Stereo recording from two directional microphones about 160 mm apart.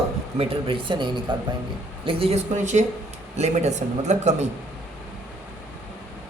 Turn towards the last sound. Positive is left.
turn(degrees=-45)  # may be behind; listen again after turning